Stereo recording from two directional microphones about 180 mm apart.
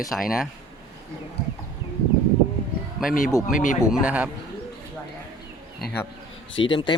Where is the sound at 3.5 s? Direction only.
45° left (ahead or behind).